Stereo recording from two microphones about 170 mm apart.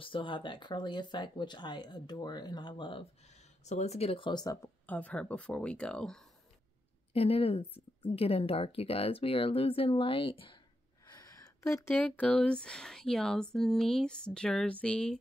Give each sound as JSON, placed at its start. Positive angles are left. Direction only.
{"t": 0.0, "sound": "speech", "side_deg": 30}
{"t": 3.6, "sound": "speech", "side_deg": 40}
{"t": 4.8, "sound": "speech", "side_deg": 10}
{"t": 7.2, "sound": "speech", "side_deg": 35}
{"t": 11.1, "sound": "speech", "side_deg": 15}